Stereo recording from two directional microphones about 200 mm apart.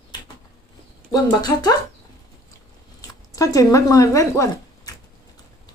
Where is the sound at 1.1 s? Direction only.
20° left (ahead or behind).